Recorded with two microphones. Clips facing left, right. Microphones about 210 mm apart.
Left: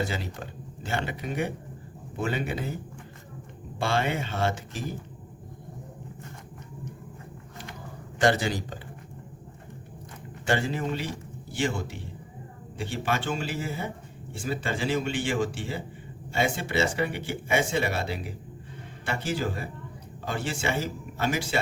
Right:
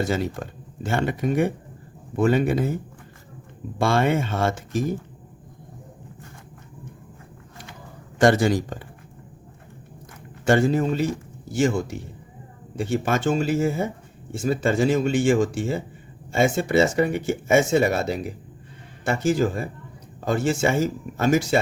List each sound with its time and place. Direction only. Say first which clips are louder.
0.4 s speech: right 6 dB; 50° right (ahead or behind)
3.8 s speech: right 7 dB; 50° right (ahead or behind)
8.2 s speech: right 6 dB; 50° right (ahead or behind)
10.4 s speech: right 8 dB; 45° right (ahead or behind)